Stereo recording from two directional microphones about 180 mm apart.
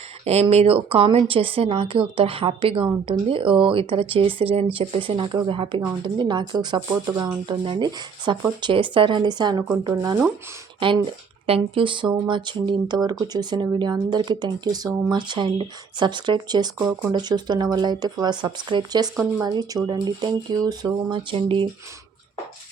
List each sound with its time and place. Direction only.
0.3 s speech: 35° right (ahead or behind); by 10.2 s 15° right (ahead or behind)
10.8 s speech: 30° right (ahead or behind)